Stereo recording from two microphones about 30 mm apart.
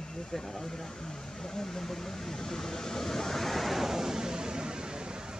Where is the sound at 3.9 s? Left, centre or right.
Centre.